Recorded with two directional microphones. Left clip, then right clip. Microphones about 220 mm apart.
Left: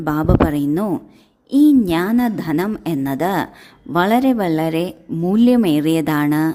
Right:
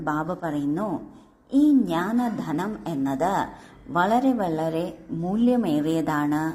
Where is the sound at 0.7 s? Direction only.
60° left (ahead or behind).